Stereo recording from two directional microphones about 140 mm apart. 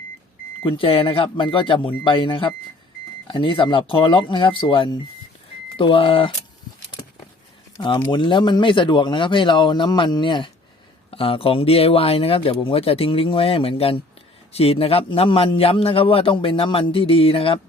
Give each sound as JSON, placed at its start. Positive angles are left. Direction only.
{"t": 0.6, "sound": "a man's voice", "side_deg": 40}
{"t": 7.8, "sound": "a man's voice", "side_deg": 35}